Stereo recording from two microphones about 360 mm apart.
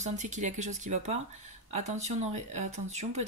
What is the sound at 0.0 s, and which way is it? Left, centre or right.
Speech, centre.